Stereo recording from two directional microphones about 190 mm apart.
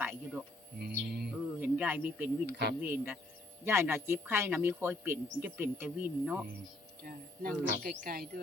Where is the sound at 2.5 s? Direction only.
60° right (ahead or behind).